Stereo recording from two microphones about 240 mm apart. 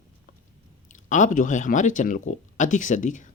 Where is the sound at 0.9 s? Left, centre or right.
Left.